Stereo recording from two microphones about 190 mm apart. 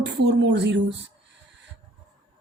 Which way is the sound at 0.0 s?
70° right (ahead or behind).